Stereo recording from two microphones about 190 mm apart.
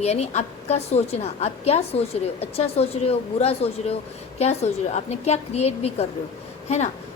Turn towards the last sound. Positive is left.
turn(degrees=35)  # may be behind; listen again after turning